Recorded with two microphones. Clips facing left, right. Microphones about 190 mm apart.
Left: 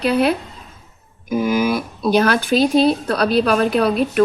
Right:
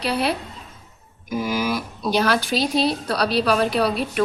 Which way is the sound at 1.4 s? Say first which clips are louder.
Left 6 dB; 55° left (ahead or behind).